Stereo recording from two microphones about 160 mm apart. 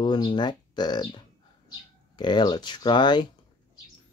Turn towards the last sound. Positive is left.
turn(degrees=25)  # may be behind; listen again after turning